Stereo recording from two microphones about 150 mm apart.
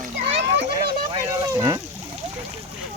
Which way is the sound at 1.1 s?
25° right (ahead or behind).